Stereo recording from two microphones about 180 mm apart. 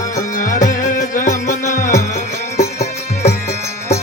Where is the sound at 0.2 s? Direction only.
45° left (ahead or behind).